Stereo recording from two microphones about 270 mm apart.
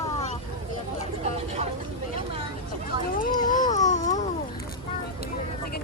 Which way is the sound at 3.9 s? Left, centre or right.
Left.